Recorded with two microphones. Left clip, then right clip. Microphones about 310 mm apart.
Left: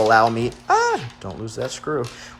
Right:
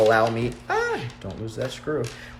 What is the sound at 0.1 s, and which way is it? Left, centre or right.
Speech, centre.